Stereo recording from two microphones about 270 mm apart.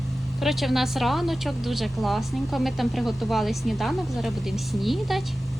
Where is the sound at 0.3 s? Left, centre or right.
Centre.